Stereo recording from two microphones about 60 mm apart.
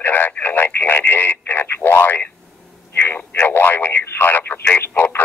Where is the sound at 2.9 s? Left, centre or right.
Left.